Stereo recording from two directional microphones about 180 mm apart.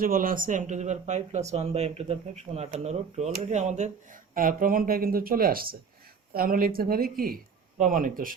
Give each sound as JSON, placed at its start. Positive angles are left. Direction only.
{"t": 0.0, "sound": "speech", "side_deg": -50}